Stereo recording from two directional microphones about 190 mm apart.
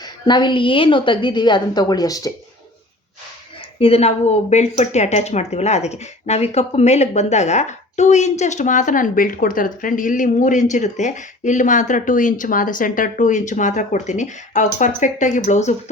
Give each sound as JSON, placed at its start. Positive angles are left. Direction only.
{"t": 0.0, "sound": "a woman's voice", "side_deg": 25}
{"t": 3.8, "sound": "speech", "side_deg": 30}